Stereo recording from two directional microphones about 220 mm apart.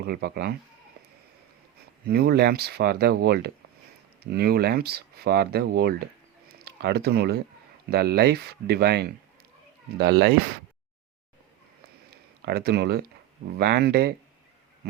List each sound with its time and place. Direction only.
0.0 s speech: 45° right (ahead or behind)
2.0 s speech: 45° right (ahead or behind)
12.5 s speech: 45° right (ahead or behind)